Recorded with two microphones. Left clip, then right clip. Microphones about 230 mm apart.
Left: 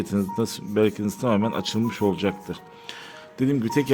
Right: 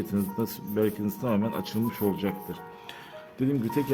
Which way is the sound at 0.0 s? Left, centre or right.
Left.